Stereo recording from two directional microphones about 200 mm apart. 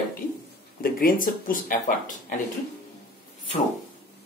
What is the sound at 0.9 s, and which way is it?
Speech, 45° left (ahead or behind).